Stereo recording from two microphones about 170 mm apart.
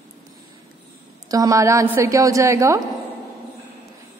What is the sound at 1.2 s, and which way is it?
A woman's voice, 20° right (ahead or behind).